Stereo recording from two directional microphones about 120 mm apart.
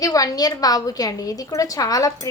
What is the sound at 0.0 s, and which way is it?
A woman's voice, 30° left (ahead or behind).